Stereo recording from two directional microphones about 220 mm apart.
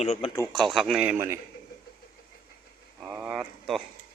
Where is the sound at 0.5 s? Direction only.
Centre (ahead or behind).